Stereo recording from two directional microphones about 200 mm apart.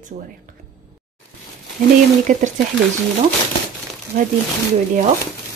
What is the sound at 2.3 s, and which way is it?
Speech, 40° right (ahead or behind).